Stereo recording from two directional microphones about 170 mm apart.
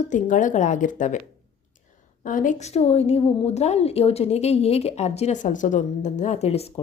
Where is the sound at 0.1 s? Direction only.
50° left (ahead or behind).